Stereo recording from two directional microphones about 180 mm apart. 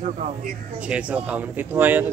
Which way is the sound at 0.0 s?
40° right (ahead or behind).